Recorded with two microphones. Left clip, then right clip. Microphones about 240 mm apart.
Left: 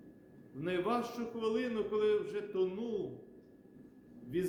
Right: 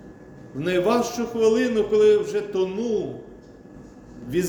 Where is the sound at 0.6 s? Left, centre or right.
Centre.